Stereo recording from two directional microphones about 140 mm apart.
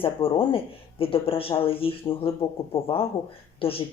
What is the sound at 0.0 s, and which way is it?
Speech, 40° left (ahead or behind).